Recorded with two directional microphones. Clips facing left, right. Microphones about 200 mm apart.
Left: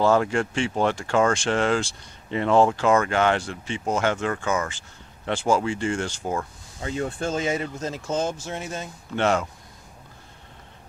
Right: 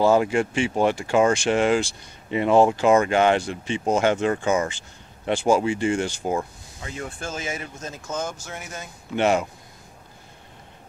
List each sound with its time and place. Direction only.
0.0 s speech: 15° right (ahead or behind)
6.8 s speech: 30° left (ahead or behind)
9.1 s speech: 15° right (ahead or behind)